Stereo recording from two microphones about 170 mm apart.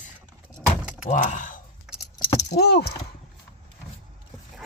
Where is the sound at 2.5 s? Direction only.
70° left (ahead or behind).